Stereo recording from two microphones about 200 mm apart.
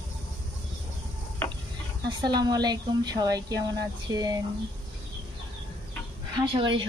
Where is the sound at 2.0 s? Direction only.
20° right (ahead or behind).